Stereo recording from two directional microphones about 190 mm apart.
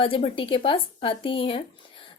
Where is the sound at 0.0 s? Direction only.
25° left (ahead or behind).